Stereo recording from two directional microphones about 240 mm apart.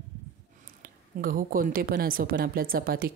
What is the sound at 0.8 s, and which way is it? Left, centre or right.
A woman's voice, right.